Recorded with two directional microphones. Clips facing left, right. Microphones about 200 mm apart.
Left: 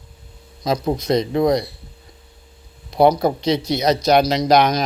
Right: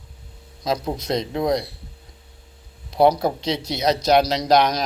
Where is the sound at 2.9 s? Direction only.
Centre (ahead or behind).